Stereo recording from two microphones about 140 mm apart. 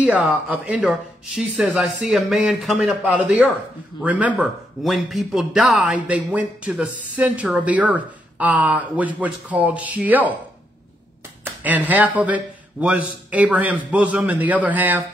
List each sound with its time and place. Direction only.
0.0 s a man's voice: 10° right (ahead or behind)
11.4 s a man's voice: 10° right (ahead or behind)